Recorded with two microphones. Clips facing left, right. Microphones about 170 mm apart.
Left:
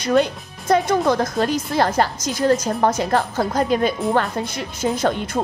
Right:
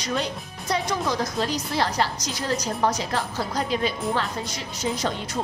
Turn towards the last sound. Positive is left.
turn(degrees=50)  # may be behind; listen again after turning